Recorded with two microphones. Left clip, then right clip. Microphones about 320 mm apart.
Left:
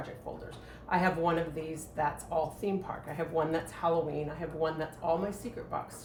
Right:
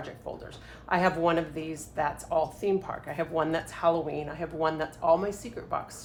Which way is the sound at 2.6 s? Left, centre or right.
Centre.